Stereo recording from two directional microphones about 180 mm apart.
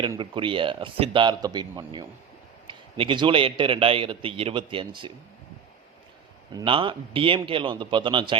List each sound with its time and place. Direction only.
0.2 s a man's voice: 30° right (ahead or behind)
6.5 s a man's voice: 25° right (ahead or behind)